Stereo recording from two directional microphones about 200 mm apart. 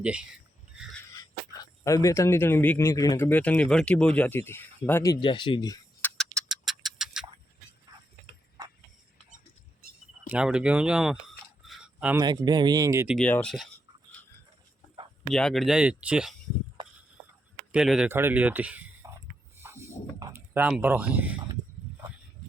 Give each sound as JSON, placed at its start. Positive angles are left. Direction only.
{"t": 0.0, "sound": "speech", "side_deg": -5}
{"t": 1.1, "sound": "speech", "side_deg": 15}
{"t": 10.2, "sound": "speech", "side_deg": -5}
{"t": 11.6, "sound": "a sound", "side_deg": -5}
{"t": 12.2, "sound": "speech", "side_deg": -20}
{"t": 13.1, "sound": "speech", "side_deg": 5}
{"t": 15.3, "sound": "speech", "side_deg": 0}
{"t": 17.7, "sound": "speech", "side_deg": -5}
{"t": 19.0, "sound": "a sound", "side_deg": -15}
{"t": 19.6, "sound": "wild animals", "side_deg": -15}
{"t": 20.1, "sound": "speech", "side_deg": -10}